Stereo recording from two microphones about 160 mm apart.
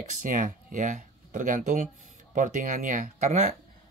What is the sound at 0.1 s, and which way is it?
Speech, 55° right (ahead or behind).